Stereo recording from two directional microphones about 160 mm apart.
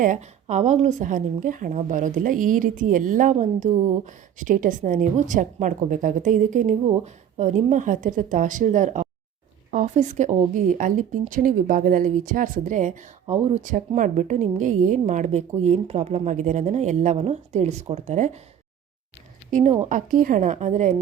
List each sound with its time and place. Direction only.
0.0 s a woman's voice: 50° right (ahead or behind)
19.5 s a woman's voice: 55° right (ahead or behind)